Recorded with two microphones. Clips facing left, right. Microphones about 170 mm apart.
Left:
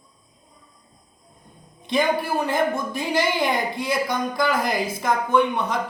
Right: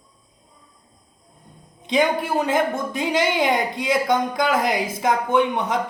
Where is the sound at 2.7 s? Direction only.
20° right (ahead or behind).